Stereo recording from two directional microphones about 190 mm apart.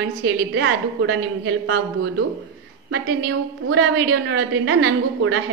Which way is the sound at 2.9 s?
55° right (ahead or behind).